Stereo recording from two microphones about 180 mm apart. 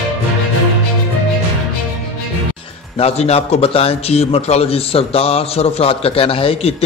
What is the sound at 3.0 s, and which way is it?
A man's voice, 35° left (ahead or behind).